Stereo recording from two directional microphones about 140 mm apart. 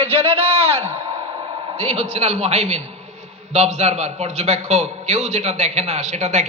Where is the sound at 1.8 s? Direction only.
50° right (ahead or behind).